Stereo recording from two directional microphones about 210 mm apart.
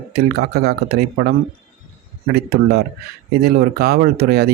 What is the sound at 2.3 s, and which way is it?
Speech, 50° right (ahead or behind).